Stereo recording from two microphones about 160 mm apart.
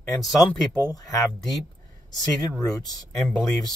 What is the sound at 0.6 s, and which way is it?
Speech, 25° left (ahead or behind).